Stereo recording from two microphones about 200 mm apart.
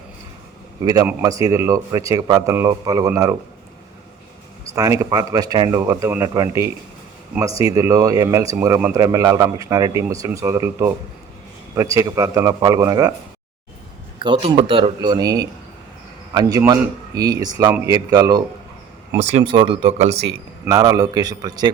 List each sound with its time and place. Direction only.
0.9 s speech: 15° right (ahead or behind)
4.6 s speech: 15° right (ahead or behind)
14.2 s speech: 25° right (ahead or behind)
19.2 s speech: 35° right (ahead or behind)
20.7 s speech: 20° right (ahead or behind)